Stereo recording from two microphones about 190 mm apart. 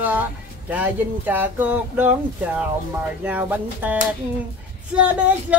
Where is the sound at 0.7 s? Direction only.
10° right (ahead or behind).